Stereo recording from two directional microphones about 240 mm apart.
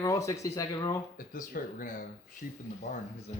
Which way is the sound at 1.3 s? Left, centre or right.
Left.